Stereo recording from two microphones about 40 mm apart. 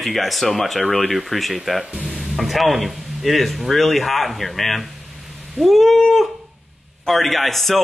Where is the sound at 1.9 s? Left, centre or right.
Right.